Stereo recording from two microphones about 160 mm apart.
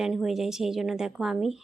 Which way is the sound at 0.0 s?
Centre (ahead or behind).